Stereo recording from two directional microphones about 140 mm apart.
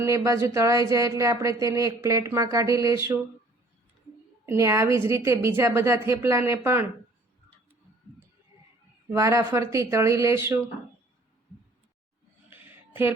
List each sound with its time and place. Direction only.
0.0 s speech: 20° right (ahead or behind)
4.4 s speech: 20° right (ahead or behind)
9.1 s speech: 20° right (ahead or behind)